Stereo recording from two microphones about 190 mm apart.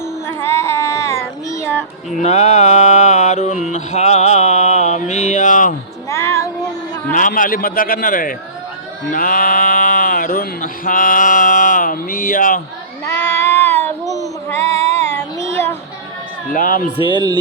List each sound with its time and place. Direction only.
0.3 s child singing: 15° left (ahead or behind)
2.2 s music: 35° left (ahead or behind)
3.7 s mantra: 40° left (ahead or behind)
6.1 s child singing: 15° left (ahead or behind)
7.1 s a man's voice: 45° left (ahead or behind)
9.1 s a sound: 50° left (ahead or behind)
13.2 s a sound: 10° left (ahead or behind)
14.0 s child singing: 20° right (ahead or behind)
14.5 s female singing: 15° left (ahead or behind)
16.5 s a man's voice: 45° left (ahead or behind)
17.1 s speech: 25° right (ahead or behind)